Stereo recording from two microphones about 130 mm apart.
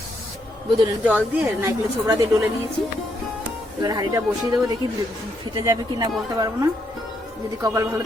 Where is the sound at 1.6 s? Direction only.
25° right (ahead or behind).